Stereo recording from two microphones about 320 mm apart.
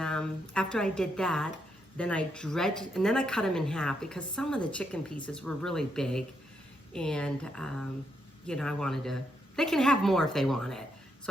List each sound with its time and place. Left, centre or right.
0.0 s a woman's voice: centre